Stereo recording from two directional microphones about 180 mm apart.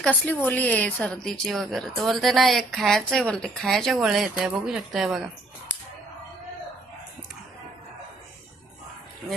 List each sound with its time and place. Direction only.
0.0 s speech: 10° left (ahead or behind)